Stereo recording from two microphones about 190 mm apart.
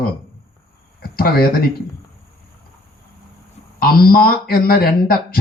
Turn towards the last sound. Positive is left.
turn(degrees=50)  # may be behind; listen again after turning